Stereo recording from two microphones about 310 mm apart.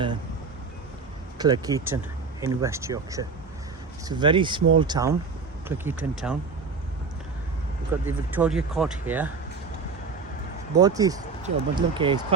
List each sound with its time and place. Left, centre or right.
1.4 s speech: centre
8.0 s speech: centre
10.8 s speech: centre